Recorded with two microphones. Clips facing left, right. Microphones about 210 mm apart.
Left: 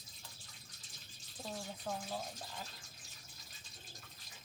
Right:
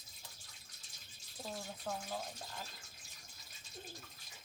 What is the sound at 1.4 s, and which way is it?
Speech, centre (ahead or behind).